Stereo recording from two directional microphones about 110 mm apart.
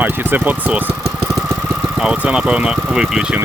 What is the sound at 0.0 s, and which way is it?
Speech, 15° right (ahead or behind).